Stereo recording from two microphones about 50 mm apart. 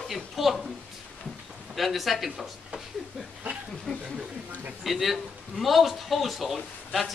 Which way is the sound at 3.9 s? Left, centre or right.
Centre.